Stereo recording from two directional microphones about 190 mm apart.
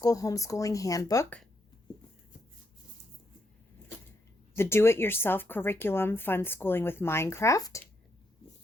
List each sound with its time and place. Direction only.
0.0 s a woman's voice: 20° left (ahead or behind)
4.5 s a woman's voice: 15° left (ahead or behind)